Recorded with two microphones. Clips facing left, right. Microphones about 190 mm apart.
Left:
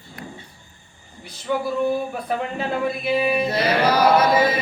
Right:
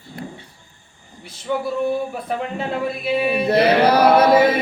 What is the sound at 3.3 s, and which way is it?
Chant, 60° right (ahead or behind).